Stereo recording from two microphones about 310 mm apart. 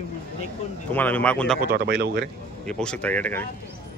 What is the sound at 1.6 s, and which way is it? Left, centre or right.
Speech, right.